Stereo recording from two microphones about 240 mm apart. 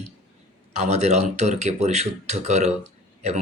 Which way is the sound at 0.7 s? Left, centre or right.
Right.